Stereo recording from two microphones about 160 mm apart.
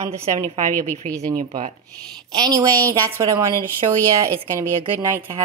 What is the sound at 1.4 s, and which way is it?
Speech, 55° right (ahead or behind).